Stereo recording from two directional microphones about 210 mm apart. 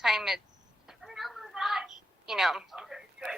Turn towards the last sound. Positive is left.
turn(degrees=0)  # may be behind; listen again after turning